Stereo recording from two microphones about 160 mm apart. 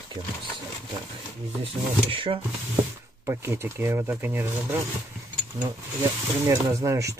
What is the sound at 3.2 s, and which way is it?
Speech, 15° right (ahead or behind).